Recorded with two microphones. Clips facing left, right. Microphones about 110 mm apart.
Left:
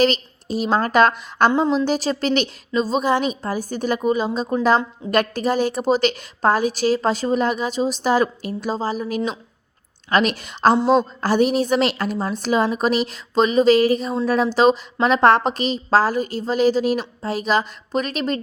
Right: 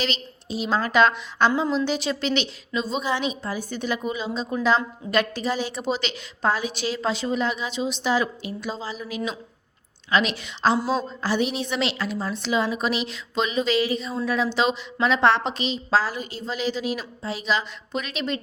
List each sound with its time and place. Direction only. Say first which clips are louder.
0.0 s a woman's voice: left 10 dB; 45° left (ahead or behind)
10.8 s a woman's voice: left 8 dB; 25° left (ahead or behind)
11.2 s a woman's voice: left 7 dB; 45° left (ahead or behind)